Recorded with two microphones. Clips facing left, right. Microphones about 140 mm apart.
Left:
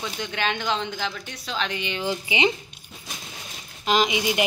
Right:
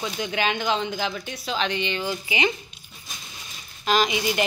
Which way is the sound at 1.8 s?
20° left (ahead or behind).